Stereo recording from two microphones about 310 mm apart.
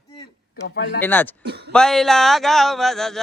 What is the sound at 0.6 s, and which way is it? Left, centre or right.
Speech, left.